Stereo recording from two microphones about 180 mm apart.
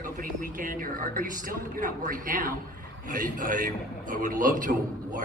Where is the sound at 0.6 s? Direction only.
50° right (ahead or behind).